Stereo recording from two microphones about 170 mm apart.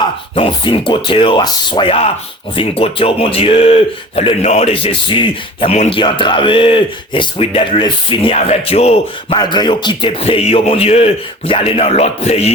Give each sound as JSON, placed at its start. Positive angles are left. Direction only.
{"t": 0.3, "sound": "speech", "side_deg": 30}
{"t": 9.4, "sound": "speech", "side_deg": 25}